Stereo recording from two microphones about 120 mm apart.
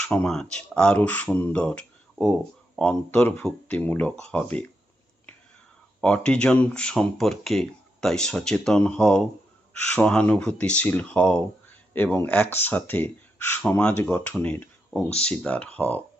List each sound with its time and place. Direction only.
0.0 s speech: 10° left (ahead or behind)
3.1 s speech: 15° left (ahead or behind)
6.0 s speech: 10° left (ahead or behind)